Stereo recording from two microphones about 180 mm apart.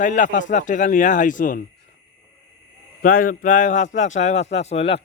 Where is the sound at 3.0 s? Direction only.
50° left (ahead or behind).